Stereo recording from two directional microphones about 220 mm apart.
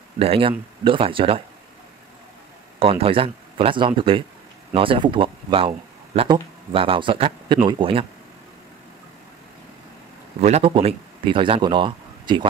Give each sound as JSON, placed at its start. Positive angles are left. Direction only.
{"t": 0.2, "sound": "speech", "side_deg": -25}
{"t": 2.8, "sound": "speech", "side_deg": -25}
{"t": 10.4, "sound": "a man's voice", "side_deg": -25}